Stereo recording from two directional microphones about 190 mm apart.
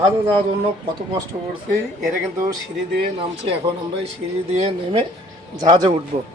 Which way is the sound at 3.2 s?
30° right (ahead or behind).